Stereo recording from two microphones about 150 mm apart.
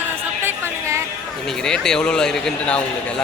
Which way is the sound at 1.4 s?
5° left (ahead or behind).